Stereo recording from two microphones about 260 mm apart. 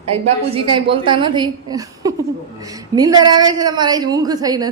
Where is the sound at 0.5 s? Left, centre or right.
Centre.